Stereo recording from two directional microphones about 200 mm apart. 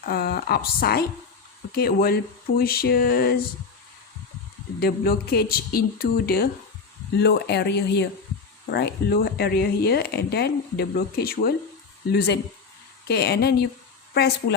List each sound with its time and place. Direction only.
0.0 s speech: 50° left (ahead or behind)
4.8 s speech: 50° left (ahead or behind)